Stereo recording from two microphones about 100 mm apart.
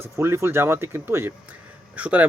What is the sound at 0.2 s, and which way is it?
Speech, 25° right (ahead or behind).